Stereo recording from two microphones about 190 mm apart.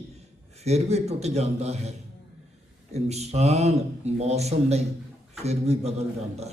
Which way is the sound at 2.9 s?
35° right (ahead or behind).